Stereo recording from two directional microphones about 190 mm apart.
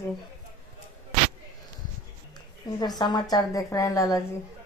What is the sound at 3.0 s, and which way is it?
Speech, 20° left (ahead or behind).